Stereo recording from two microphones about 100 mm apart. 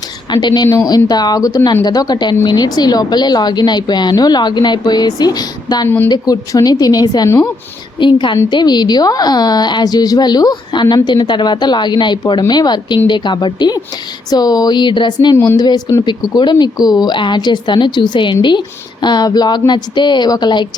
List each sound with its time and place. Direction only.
0.3 s a woman's voice: 45° left (ahead or behind)
7.9 s a woman's voice: 55° left (ahead or behind)